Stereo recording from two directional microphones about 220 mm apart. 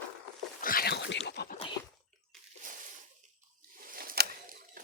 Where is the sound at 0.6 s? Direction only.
40° left (ahead or behind).